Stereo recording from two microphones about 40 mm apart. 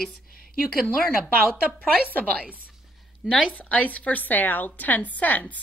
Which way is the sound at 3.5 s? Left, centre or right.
Left.